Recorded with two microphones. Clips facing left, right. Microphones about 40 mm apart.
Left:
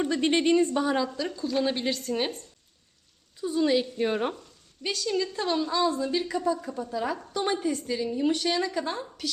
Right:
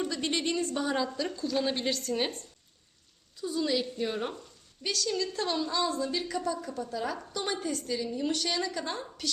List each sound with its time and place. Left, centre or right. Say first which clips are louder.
0.0 s a woman's voice: left 7 dB; left
0.8 s a woman's voice: left 4 dB; centre
3.4 s a woman's voice: left 5 dB; left
4.8 s a woman's voice: left 3 dB; centre